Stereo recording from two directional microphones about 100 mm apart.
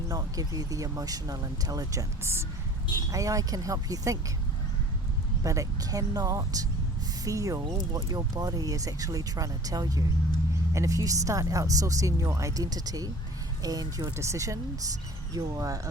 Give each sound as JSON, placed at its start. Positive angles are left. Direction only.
{"t": 0.1, "sound": "speech", "side_deg": -35}
{"t": 5.4, "sound": "speech", "side_deg": -35}